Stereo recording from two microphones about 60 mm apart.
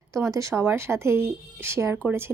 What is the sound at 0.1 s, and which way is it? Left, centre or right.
Speech, right.